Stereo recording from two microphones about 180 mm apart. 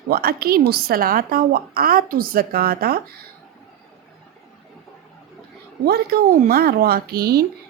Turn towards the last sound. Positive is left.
turn(degrees=-60)  # may be behind; listen again after turning